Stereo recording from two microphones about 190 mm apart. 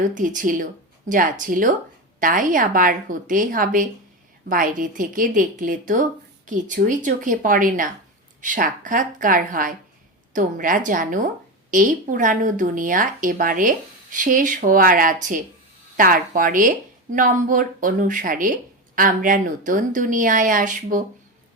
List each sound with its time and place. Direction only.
0.0 s speech: 45° right (ahead or behind)